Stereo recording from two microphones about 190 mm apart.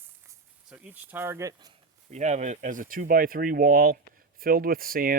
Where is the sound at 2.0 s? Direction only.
35° right (ahead or behind).